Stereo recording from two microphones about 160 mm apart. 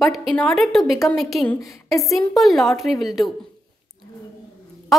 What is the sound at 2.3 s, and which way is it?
A woman's voice, centre (ahead or behind).